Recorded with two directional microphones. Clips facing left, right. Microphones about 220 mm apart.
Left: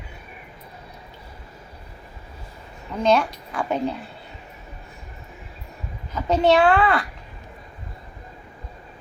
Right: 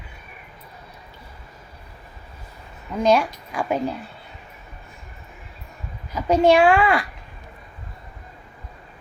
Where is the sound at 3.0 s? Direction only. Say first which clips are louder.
Right 1 dB; 10° right (ahead or behind).